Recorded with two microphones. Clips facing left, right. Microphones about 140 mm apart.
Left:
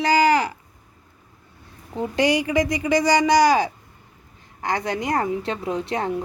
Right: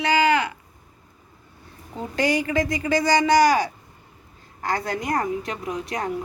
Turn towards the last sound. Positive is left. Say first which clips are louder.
# left 3 dB
turn(degrees=25)  # may be behind; listen again after turning